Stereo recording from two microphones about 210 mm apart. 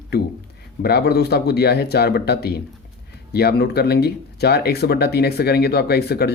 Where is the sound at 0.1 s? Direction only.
50° left (ahead or behind).